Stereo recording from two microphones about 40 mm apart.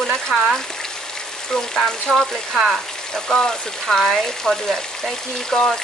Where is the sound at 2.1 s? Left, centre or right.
Centre.